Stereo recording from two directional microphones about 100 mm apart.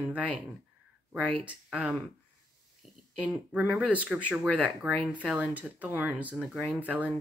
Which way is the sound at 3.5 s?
10° right (ahead or behind).